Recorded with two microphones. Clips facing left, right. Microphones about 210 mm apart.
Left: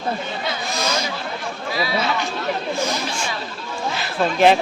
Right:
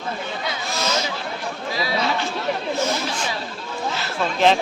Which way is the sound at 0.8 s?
10° left (ahead or behind).